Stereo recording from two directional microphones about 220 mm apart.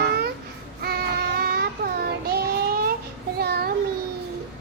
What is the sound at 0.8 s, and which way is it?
Child singing, 45° right (ahead or behind).